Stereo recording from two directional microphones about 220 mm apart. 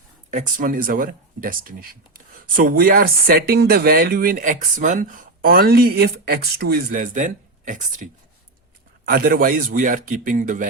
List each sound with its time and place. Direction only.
0.3 s speech: 35° right (ahead or behind)